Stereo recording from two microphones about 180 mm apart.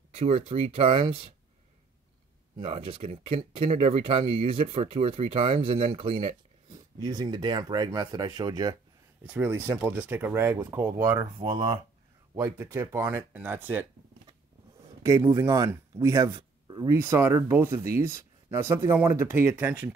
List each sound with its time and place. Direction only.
0.1 s speech: 35° right (ahead or behind)
2.6 s speech: 35° right (ahead or behind)
5.9 s a sound: 30° right (ahead or behind)
7.1 s speech: 20° right (ahead or behind)
9.2 s speech: 10° right (ahead or behind)
11.3 s speech: 25° right (ahead or behind)
12.4 s speech: 15° right (ahead or behind)
15.0 s speech: 15° right (ahead or behind)